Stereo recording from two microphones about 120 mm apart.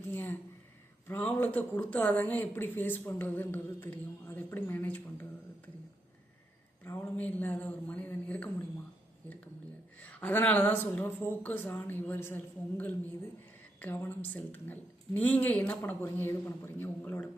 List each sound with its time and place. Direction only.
0.1 s a sound: 15° left (ahead or behind)
1.0 s a woman's voice: 15° left (ahead or behind)
6.9 s a woman's voice: 10° left (ahead or behind)
10.0 s a woman's voice: 10° left (ahead or behind)